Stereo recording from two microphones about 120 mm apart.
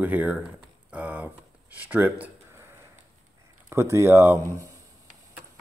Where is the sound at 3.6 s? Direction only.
25° right (ahead or behind).